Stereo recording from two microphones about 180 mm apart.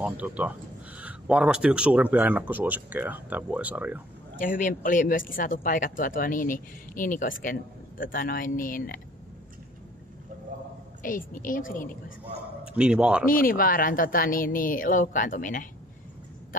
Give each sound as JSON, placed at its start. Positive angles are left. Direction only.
{"t": 0.0, "sound": "speech", "side_deg": -5}
{"t": 4.4, "sound": "speech", "side_deg": 50}
{"t": 11.0, "sound": "speech", "side_deg": 50}
{"t": 12.6, "sound": "speech", "side_deg": -5}
{"t": 13.2, "sound": "speech", "side_deg": 50}